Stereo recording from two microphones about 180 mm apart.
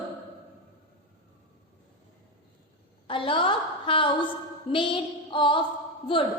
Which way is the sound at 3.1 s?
30° left (ahead or behind).